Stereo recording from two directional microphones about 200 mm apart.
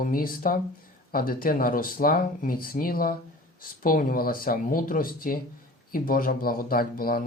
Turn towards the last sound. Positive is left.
turn(degrees=50)  # may be behind; listen again after turning